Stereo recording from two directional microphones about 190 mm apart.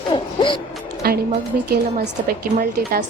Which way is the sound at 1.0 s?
55° right (ahead or behind).